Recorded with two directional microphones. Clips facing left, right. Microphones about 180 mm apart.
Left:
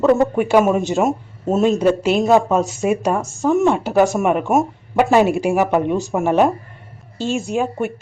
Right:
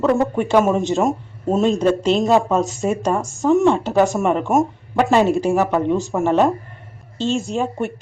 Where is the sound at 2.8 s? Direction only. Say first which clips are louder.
Left 2 dB; 15° left (ahead or behind).